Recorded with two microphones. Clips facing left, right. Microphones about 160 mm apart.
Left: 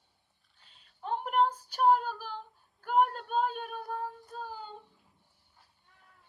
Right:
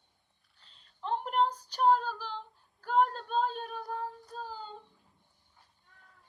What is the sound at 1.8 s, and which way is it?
Female singing, 10° left (ahead or behind).